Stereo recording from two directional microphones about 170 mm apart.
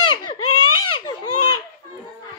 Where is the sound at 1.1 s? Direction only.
25° left (ahead or behind).